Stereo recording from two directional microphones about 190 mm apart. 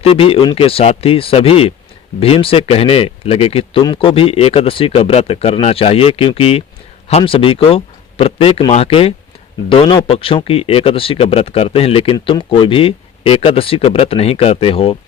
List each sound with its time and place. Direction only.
0.0 s speech: 30° left (ahead or behind)